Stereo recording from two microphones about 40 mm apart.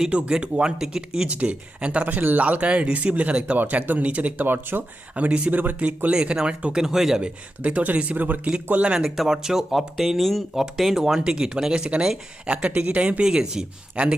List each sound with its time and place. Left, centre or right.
0.3 s speech: right
1.3 s speech: right
2.0 s speech: right
3.6 s speech: right
4.4 s speech: right
5.1 s speech: right
6.1 s speech: right
6.7 s speech: centre
7.6 s speech: right
9.0 s speech: centre
11.2 s speech: right
13.9 s speech: right